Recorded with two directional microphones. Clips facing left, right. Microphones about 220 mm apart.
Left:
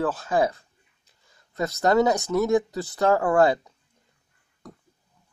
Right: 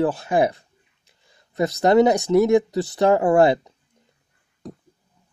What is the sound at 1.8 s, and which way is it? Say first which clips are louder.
Speech: right 4 dB; 15° right (ahead or behind).